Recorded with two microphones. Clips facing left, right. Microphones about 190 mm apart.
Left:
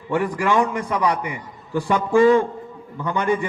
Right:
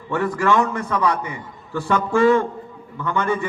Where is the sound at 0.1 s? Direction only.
15° left (ahead or behind).